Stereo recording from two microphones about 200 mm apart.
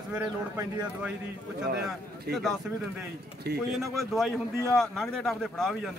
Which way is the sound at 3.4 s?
55° right (ahead or behind).